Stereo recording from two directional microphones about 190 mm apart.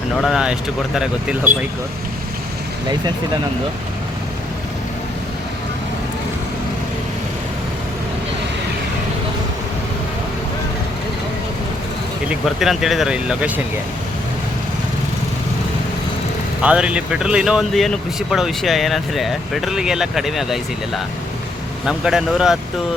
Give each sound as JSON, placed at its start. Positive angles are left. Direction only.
{"t": 0.2, "sound": "speech", "side_deg": -5}
{"t": 1.5, "sound": "speech", "side_deg": -45}
{"t": 12.3, "sound": "speech", "side_deg": 0}
{"t": 16.6, "sound": "speech", "side_deg": -5}